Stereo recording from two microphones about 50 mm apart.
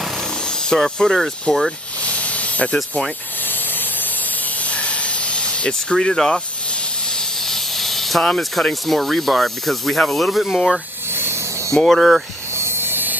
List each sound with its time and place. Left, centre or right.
0.5 s speech: centre
2.0 s hiss: left
3.4 s spray: left
4.6 s hiss: left
7.1 s snake: centre
8.4 s speech: centre
11.1 s a sound: right
11.7 s speech: centre
12.5 s a sound: right